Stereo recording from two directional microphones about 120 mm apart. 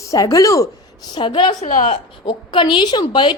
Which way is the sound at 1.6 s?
70° left (ahead or behind).